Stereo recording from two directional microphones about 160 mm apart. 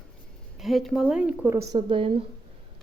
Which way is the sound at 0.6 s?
Centre (ahead or behind).